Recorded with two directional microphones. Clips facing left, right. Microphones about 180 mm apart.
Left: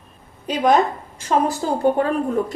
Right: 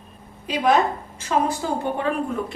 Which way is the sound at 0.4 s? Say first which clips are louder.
Left 2 dB; 40° left (ahead or behind).